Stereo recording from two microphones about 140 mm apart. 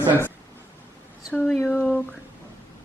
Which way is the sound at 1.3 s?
10° left (ahead or behind).